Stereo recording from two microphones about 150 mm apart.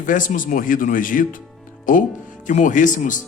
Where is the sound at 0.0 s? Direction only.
60° left (ahead or behind).